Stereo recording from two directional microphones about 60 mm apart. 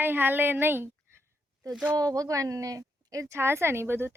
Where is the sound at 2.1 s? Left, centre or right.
Right.